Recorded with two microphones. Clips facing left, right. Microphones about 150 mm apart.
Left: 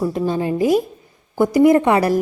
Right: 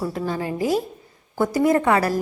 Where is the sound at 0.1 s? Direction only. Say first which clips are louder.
Left 6 dB; 20° left (ahead or behind).